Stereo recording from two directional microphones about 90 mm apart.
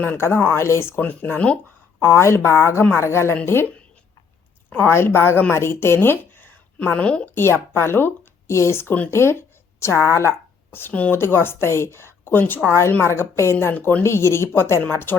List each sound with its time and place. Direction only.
0.0 s speech: 25° left (ahead or behind)
2.0 s speech: 25° left (ahead or behind)
4.7 s a woman's voice: 25° left (ahead or behind)
7.3 s a woman's voice: 25° left (ahead or behind)